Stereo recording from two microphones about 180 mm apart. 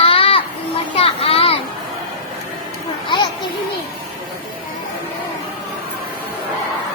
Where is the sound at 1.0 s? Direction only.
30° left (ahead or behind).